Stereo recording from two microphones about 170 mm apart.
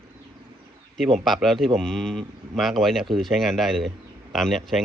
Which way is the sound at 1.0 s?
Centre (ahead or behind).